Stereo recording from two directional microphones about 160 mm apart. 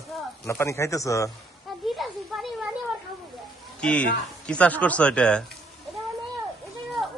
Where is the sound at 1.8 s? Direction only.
Centre (ahead or behind).